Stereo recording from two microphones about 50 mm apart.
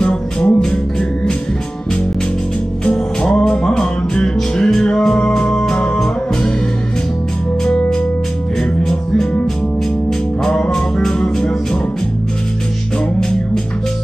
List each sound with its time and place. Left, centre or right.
0.0 s music: centre
2.8 s music: centre
10.4 s music: centre